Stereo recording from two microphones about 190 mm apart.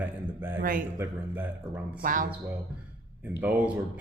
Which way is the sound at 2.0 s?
45° right (ahead or behind).